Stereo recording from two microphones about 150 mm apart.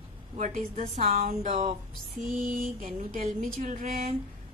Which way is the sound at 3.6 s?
55° right (ahead or behind).